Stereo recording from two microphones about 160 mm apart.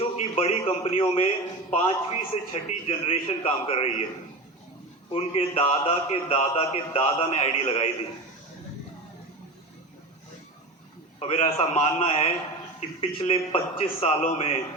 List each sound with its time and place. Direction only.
0.0 s a man's voice: 40° left (ahead or behind)
5.1 s a man's voice: 40° left (ahead or behind)
11.2 s a man's voice: 40° left (ahead or behind)